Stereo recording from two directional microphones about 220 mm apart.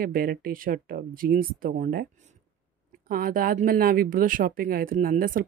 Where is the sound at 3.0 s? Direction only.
40° right (ahead or behind).